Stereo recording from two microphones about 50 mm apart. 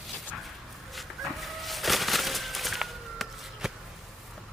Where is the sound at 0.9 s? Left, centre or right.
Centre.